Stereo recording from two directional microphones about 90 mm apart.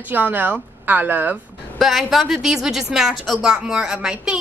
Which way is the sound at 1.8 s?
5° right (ahead or behind).